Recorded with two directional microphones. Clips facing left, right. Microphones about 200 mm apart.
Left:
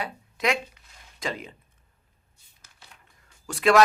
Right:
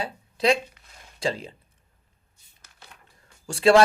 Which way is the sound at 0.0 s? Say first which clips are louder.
Right 4 dB; 30° right (ahead or behind).